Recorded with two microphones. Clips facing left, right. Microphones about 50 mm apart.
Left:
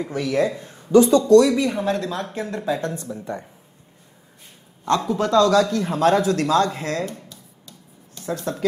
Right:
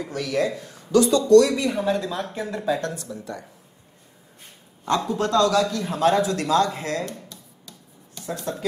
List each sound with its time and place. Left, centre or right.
0.0 s speech: left
1.5 s speech: centre
2.8 s speech: left
5.0 s speech: left
5.5 s speech: left
7.1 s a sound: centre